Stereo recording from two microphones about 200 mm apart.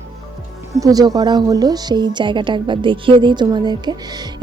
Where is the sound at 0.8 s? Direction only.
20° right (ahead or behind).